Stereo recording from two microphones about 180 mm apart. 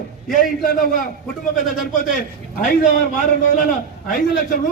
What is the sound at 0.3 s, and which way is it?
Speech, 50° left (ahead or behind).